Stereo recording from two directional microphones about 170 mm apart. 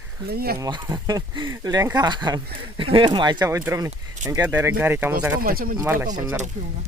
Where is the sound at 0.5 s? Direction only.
20° right (ahead or behind).